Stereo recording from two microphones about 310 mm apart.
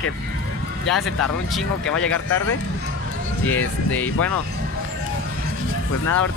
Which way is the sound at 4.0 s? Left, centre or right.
Centre.